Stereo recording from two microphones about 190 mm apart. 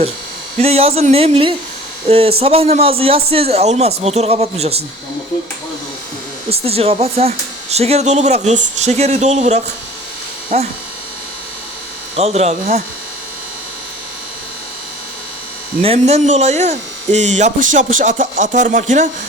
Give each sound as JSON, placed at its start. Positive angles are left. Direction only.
{"t": 0.6, "sound": "speech", "side_deg": -30}
{"t": 6.5, "sound": "speech", "side_deg": -30}
{"t": 12.1, "sound": "speech", "side_deg": -35}
{"t": 15.8, "sound": "speech", "side_deg": -30}